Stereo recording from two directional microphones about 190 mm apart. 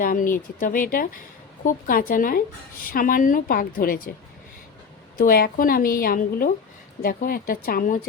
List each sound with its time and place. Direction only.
0.0 s a woman's voice: 45° left (ahead or behind)
5.1 s a woman's voice: 50° left (ahead or behind)